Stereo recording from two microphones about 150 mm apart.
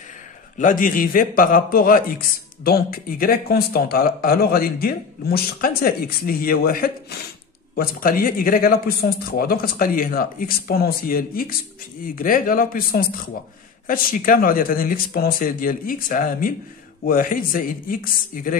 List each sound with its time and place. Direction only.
0.6 s a man's voice: 65° left (ahead or behind)